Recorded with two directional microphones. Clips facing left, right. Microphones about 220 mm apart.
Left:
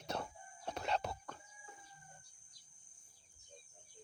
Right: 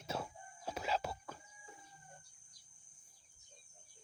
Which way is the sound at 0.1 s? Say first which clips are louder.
Even; 5° right (ahead or behind).